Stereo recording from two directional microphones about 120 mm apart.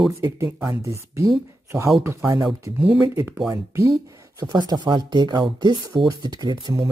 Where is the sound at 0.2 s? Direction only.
20° right (ahead or behind).